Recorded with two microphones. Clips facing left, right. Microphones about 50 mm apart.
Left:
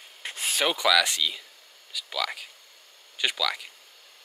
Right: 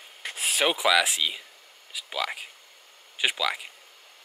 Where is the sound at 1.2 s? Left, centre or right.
Right.